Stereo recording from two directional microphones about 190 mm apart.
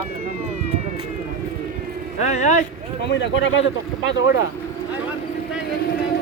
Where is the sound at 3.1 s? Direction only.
70° left (ahead or behind).